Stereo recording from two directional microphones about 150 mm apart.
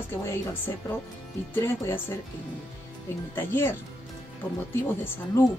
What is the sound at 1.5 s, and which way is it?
Speech, 15° left (ahead or behind).